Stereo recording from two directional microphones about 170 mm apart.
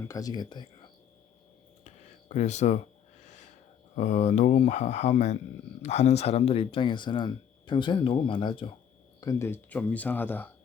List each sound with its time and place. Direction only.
0.1 s speech: 20° left (ahead or behind)
2.3 s speech: 40° left (ahead or behind)
3.9 s speech: 40° left (ahead or behind)
9.2 s speech: 15° left (ahead or behind)